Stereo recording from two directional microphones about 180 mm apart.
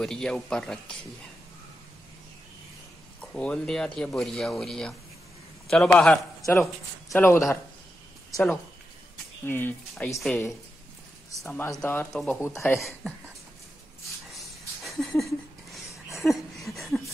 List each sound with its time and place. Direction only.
0.0 s speech: 5° left (ahead or behind)
3.2 s speech: 5° left (ahead or behind)
7.2 s speech: 15° left (ahead or behind)
9.5 s speech: 10° left (ahead or behind)
11.8 s speech: 10° left (ahead or behind)
12.1 s speech: centre (ahead or behind)
12.4 s speech: 15° left (ahead or behind)
13.0 s speech: centre (ahead or behind)
14.9 s a sound: centre (ahead or behind)